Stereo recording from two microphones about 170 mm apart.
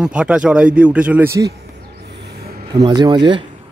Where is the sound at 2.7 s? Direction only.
25° right (ahead or behind).